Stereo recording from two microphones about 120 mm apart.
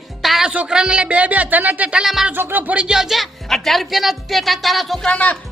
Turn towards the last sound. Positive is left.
turn(degrees=10)  # may be behind; listen again after turning